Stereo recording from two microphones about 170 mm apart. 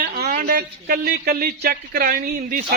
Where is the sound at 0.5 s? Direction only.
65° right (ahead or behind).